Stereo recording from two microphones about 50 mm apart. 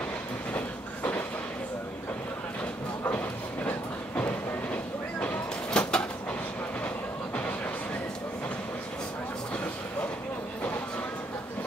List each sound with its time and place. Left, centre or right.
0.6 s train: left
5.7 s bird: centre